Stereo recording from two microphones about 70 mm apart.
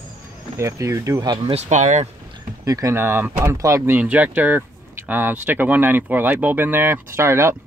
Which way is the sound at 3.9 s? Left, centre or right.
Right.